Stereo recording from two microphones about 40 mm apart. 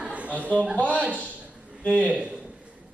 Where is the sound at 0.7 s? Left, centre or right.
Left.